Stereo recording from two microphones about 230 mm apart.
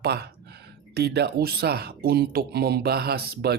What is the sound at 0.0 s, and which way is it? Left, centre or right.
Speech, right.